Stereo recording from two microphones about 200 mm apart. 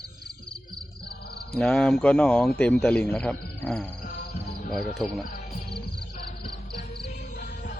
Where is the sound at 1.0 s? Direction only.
55° left (ahead or behind).